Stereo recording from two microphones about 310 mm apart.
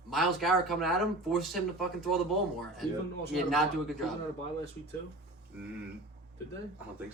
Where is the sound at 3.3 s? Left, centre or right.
Centre.